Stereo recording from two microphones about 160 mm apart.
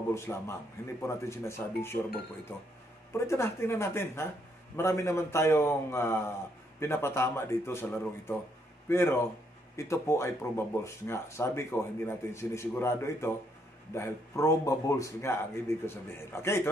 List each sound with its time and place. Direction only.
0.1 s speech: 15° left (ahead or behind)
3.1 s speech: 15° left (ahead or behind)
8.8 s speech: 15° left (ahead or behind)